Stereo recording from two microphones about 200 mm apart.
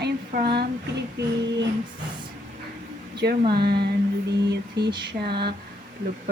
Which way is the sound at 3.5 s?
55° right (ahead or behind).